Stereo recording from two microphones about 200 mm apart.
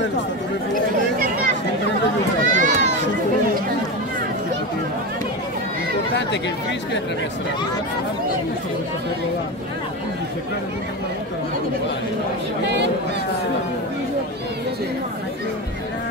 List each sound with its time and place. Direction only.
2.4 s run: 40° right (ahead or behind)